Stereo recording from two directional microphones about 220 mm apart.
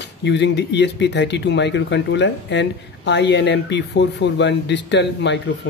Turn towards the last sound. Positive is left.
turn(degrees=50)  # may be behind; listen again after turning